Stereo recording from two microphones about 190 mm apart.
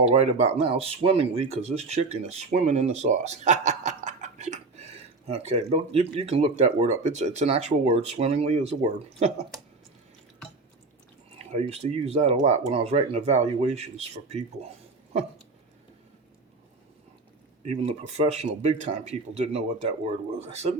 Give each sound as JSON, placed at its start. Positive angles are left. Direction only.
{"t": 0.1, "sound": "speech", "side_deg": -35}
{"t": 11.7, "sound": "speech", "side_deg": -35}
{"t": 17.6, "sound": "speech", "side_deg": -35}